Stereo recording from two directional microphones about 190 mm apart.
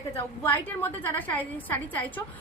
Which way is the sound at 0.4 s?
10° left (ahead or behind).